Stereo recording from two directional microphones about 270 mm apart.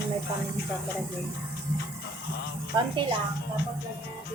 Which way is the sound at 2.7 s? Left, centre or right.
Centre.